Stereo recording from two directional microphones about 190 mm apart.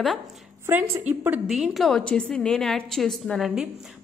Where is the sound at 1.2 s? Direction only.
5° right (ahead or behind).